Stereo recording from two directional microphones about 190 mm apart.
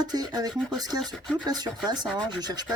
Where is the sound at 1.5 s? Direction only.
20° right (ahead or behind).